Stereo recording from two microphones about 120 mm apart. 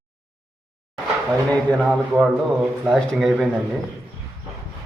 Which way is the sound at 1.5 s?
10° left (ahead or behind).